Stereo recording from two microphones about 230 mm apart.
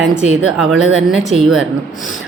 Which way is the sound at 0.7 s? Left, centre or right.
Right.